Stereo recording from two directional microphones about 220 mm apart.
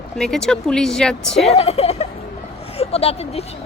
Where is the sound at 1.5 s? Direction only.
25° left (ahead or behind).